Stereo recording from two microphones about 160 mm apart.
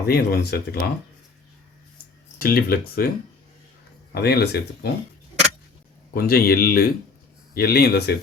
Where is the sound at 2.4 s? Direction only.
70° left (ahead or behind).